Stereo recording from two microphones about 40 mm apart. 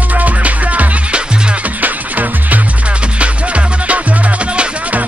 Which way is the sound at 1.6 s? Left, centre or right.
Right.